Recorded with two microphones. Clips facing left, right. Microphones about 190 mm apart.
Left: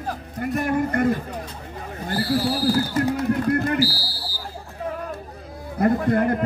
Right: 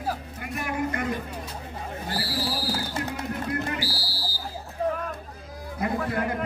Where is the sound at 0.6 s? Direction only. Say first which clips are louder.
Left 7 dB; 50° left (ahead or behind).